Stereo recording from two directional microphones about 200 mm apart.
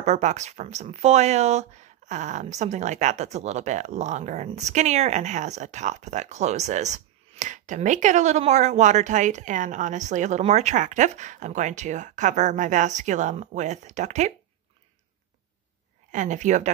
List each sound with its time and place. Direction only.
0.0 s speech: 35° right (ahead or behind)
16.1 s speech: 40° right (ahead or behind)